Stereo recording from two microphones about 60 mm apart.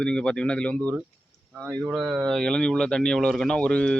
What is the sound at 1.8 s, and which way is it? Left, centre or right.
Speech, centre.